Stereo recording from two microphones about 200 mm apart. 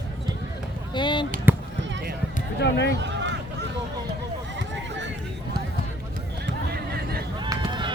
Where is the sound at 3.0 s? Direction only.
65° right (ahead or behind).